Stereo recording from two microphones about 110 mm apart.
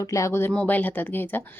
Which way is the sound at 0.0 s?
30° left (ahead or behind).